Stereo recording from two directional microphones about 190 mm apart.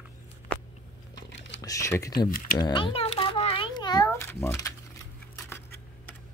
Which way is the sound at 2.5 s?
25° left (ahead or behind).